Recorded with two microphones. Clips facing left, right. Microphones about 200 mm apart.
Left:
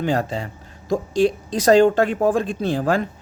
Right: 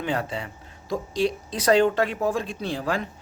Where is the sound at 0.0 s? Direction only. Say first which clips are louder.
Left 6 dB; 40° left (ahead or behind).